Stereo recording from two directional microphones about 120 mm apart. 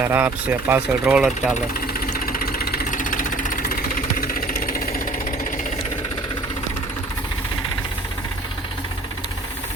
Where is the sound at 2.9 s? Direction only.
90° left.